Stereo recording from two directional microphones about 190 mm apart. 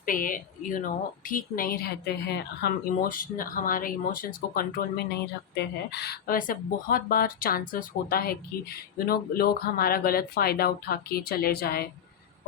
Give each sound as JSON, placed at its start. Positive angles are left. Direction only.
{"t": 0.0, "sound": "a woman's voice", "side_deg": 45}